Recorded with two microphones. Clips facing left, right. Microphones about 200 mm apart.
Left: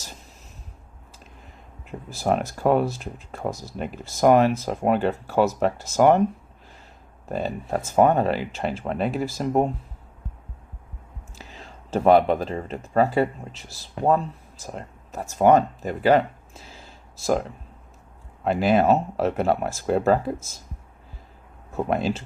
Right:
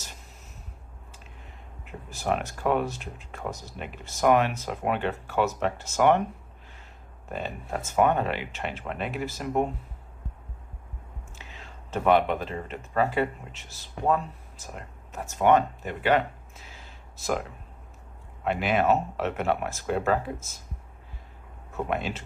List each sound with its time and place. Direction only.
1.8 s speech: 35° left (ahead or behind)
7.3 s speech: 35° left (ahead or behind)
11.3 s speech: 35° left (ahead or behind)
18.4 s speech: 35° left (ahead or behind)
21.8 s speech: 35° left (ahead or behind)